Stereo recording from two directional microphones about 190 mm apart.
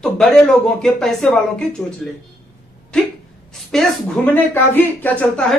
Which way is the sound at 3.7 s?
5° left (ahead or behind).